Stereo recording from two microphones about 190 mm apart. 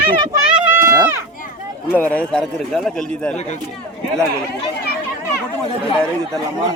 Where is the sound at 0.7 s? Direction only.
15° right (ahead or behind).